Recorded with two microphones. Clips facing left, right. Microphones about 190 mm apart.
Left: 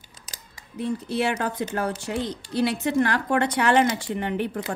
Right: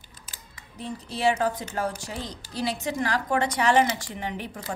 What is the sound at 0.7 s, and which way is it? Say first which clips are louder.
A woman's voice: left 8 dB; 60° left (ahead or behind).